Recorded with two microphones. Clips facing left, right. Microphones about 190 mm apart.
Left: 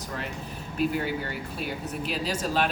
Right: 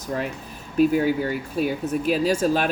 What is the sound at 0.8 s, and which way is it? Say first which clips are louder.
Speech: right 9 dB; 45° right (ahead or behind).